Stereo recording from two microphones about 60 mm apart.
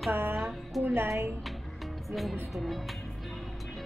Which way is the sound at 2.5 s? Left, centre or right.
Centre.